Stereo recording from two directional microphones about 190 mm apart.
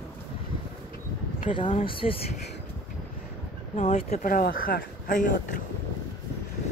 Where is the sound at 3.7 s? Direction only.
35° left (ahead or behind).